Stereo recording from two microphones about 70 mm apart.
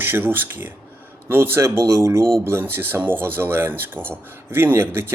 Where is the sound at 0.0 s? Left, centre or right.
Right.